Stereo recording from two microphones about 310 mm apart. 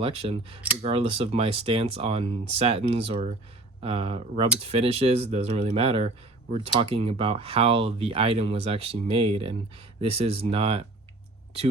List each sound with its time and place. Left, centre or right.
0.0 s speech: centre